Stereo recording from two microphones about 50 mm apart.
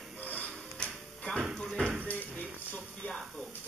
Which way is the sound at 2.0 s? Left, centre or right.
Left.